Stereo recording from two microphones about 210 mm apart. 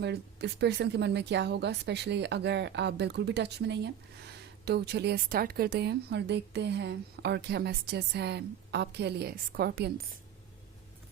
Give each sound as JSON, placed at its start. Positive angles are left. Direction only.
{"t": 0.0, "sound": "a woman's voice", "side_deg": -55}